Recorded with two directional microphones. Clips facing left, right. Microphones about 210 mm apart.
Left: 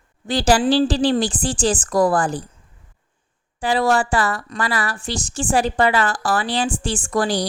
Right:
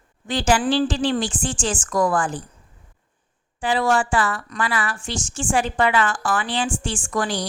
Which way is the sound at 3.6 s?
40° left (ahead or behind).